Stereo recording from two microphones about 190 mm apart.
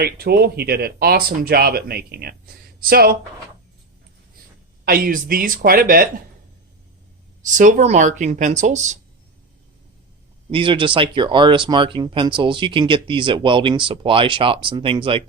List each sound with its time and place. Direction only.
0.0 s speech: 55° right (ahead or behind)
4.9 s speech: 50° right (ahead or behind)
7.5 s speech: 40° right (ahead or behind)
10.5 s speech: 25° right (ahead or behind)